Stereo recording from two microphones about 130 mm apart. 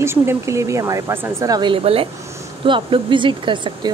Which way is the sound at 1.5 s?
35° right (ahead or behind).